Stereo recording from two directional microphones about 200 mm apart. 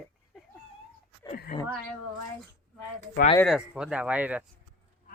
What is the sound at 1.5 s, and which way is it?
Speech, 35° left (ahead or behind).